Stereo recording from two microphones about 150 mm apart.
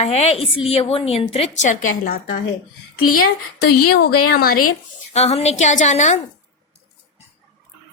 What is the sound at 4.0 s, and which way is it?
Speech, 90° left.